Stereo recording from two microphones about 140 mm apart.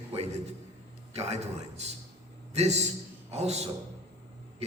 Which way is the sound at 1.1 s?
50° right (ahead or behind).